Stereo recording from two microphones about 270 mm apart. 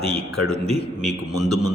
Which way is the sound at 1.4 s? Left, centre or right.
Centre.